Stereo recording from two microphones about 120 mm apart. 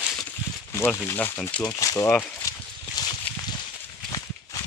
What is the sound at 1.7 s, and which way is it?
Speech, 30° left (ahead or behind).